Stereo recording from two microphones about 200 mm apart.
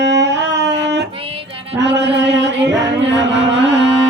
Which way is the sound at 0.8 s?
60° right (ahead or behind).